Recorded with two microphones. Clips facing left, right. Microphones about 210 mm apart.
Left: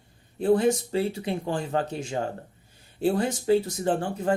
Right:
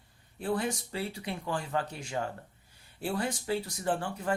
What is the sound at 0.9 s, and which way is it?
Speech, 25° left (ahead or behind).